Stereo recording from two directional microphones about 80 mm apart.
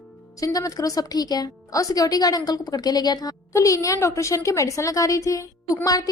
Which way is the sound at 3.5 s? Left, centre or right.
Left.